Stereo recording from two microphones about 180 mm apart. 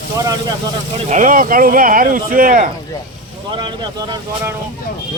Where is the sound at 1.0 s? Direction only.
45° right (ahead or behind).